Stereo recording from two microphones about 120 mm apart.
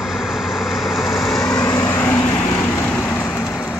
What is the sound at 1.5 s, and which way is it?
Vehicle, 25° left (ahead or behind).